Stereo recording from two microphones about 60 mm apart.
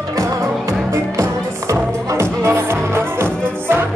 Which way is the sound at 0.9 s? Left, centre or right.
Right.